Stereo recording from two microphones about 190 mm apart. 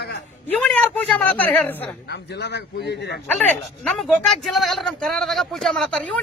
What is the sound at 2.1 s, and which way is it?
A man's voice, 60° left (ahead or behind).